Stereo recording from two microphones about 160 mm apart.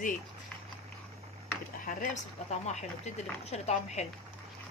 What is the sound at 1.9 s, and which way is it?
Speech, 55° left (ahead or behind).